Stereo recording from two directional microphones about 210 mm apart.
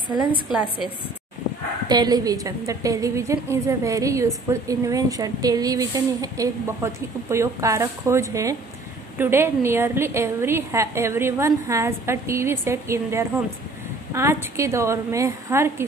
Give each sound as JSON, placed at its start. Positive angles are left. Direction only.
{"t": 1.9, "sound": "a woman's voice", "side_deg": -20}